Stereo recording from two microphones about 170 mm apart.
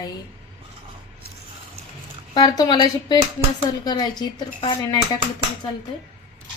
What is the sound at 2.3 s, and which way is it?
A woman's voice, 25° left (ahead or behind).